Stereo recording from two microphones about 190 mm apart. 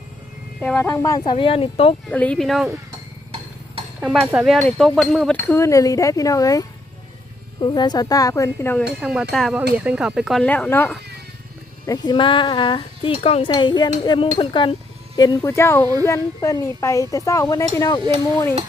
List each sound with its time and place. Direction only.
0.6 s speech: 10° left (ahead or behind); by 2.0 s 30° left (ahead or behind)
2.0 s speech: 5° left (ahead or behind)
4.0 s speech: centre (ahead or behind)
9.0 s speech: 5° right (ahead or behind)
11.9 s speech: 25° left (ahead or behind)